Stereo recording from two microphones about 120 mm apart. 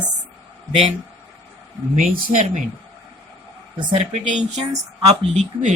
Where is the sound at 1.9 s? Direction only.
90° right.